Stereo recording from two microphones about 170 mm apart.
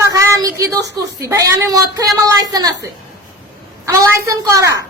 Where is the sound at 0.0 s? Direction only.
20° right (ahead or behind).